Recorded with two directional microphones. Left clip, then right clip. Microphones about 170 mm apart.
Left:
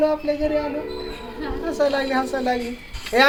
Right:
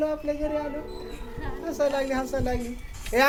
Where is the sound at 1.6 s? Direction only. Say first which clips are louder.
Left 4 dB; 20° right (ahead or behind).